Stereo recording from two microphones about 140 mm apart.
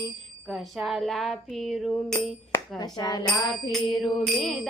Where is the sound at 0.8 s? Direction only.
Centre (ahead or behind).